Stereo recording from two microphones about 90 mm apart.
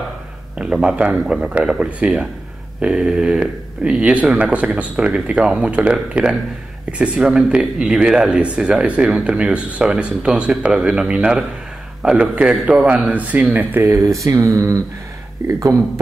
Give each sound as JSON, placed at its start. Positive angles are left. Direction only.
{"t": 0.6, "sound": "speech", "side_deg": -10}
{"t": 14.2, "sound": "speech", "side_deg": -35}